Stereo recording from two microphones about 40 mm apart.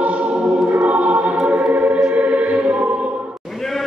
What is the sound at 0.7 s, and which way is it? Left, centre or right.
Music, right.